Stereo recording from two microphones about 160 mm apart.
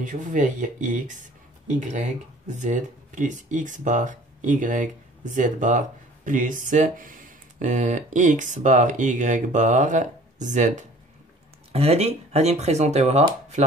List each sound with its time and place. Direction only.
0.0 s speech: 50° right (ahead or behind)
11.7 s speech: 40° right (ahead or behind)